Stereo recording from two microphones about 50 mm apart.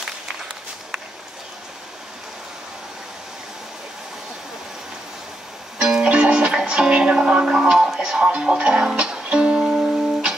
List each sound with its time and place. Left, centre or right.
5.8 s music: centre
8.3 s speech: right
8.9 s music: centre